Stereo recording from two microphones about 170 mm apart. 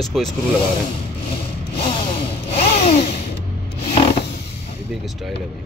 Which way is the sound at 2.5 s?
40° left (ahead or behind).